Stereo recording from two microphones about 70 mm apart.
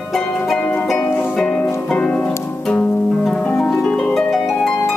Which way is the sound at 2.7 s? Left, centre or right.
Centre.